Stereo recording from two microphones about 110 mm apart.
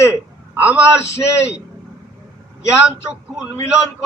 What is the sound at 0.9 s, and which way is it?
Speech, 25° left (ahead or behind).